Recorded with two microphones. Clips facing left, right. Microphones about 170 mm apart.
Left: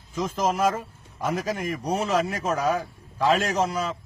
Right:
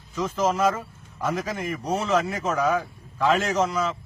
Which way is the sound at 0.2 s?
10° left (ahead or behind).